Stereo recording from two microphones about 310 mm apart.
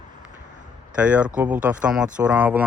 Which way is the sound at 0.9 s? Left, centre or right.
Centre.